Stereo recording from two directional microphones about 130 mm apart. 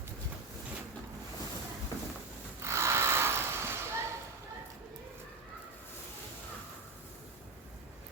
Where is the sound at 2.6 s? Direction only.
20° right (ahead or behind).